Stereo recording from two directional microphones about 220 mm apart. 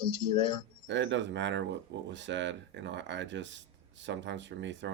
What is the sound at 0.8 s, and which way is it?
Speech, 55° right (ahead or behind).